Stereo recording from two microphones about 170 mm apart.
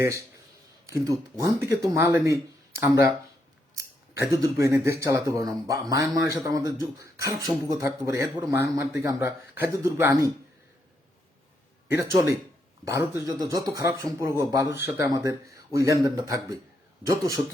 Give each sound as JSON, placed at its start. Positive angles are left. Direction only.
{"t": 0.0, "sound": "speech", "side_deg": -15}
{"t": 12.8, "sound": "speech", "side_deg": -15}